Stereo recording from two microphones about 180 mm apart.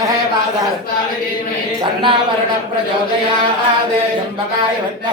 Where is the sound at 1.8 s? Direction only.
25° right (ahead or behind).